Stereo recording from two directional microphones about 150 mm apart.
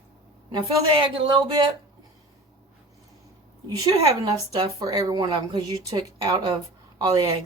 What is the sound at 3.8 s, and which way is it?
A woman's voice, 25° right (ahead or behind).